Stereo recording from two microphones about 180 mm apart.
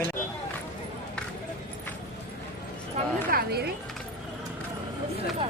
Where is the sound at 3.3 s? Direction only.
60° right (ahead or behind).